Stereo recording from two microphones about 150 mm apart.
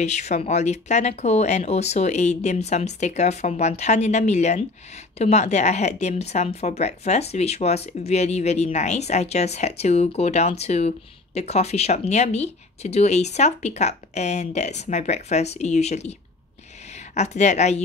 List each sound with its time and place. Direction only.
0.0 s speech: 50° left (ahead or behind)